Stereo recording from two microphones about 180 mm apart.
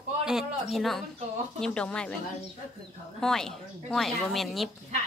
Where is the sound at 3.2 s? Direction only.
5° left (ahead or behind).